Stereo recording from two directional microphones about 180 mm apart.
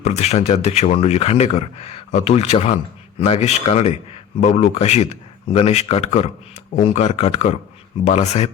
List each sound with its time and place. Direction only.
0.0 s speech: 35° left (ahead or behind)